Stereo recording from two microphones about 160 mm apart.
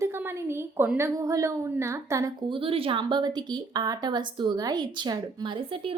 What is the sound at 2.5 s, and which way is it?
A woman's voice, 35° right (ahead or behind).